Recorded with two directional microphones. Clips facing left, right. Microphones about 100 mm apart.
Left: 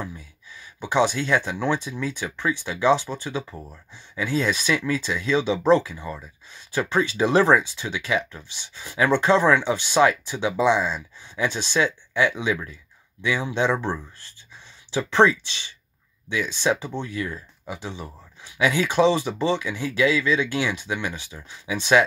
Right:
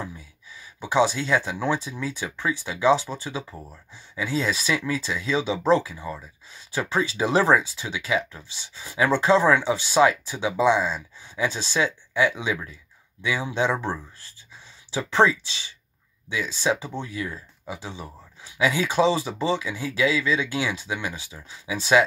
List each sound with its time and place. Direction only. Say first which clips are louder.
0.8 s speech: even; 15° right (ahead or behind)
4.1 s speech: left 2 dB; 25° right (ahead or behind)
16.3 s speech: left 2 dB; 15° right (ahead or behind)